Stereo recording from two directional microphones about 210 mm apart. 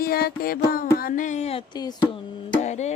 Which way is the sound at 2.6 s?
35° left (ahead or behind).